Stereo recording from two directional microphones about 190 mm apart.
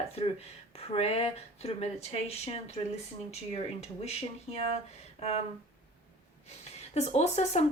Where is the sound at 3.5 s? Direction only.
35° left (ahead or behind).